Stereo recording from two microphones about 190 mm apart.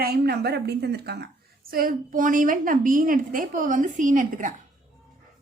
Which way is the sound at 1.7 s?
45° right (ahead or behind).